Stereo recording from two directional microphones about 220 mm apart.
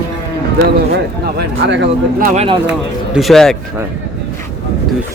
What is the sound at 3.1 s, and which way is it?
Speech, centre (ahead or behind).